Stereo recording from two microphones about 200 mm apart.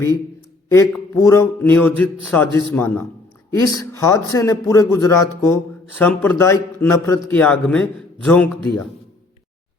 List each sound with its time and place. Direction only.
0.7 s a man's voice: 15° left (ahead or behind)